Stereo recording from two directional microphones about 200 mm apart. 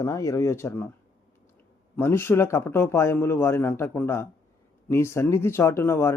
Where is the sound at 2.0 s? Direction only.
10° left (ahead or behind).